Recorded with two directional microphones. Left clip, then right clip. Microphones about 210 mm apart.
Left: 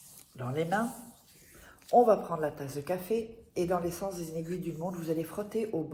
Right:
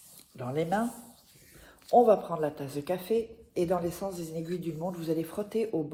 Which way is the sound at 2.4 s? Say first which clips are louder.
Right 1 dB; 55° right (ahead or behind).